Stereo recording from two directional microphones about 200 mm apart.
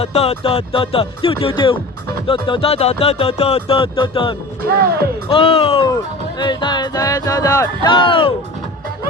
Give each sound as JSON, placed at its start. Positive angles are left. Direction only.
{"t": 0.0, "sound": "speech", "side_deg": 30}